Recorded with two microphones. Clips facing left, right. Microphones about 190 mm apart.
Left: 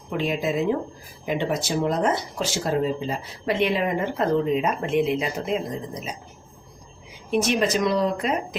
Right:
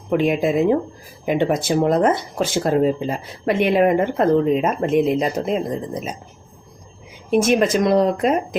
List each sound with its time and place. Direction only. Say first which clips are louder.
0.1 s speech: right 7 dB; 55° right (ahead or behind)
7.3 s speech: right 6 dB; 50° right (ahead or behind)